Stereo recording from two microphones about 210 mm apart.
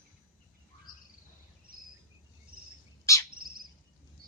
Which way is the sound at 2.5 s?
45° right (ahead or behind).